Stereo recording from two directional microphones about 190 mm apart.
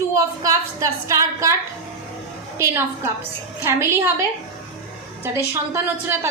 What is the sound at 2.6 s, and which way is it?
A woman's voice, 15° right (ahead or behind).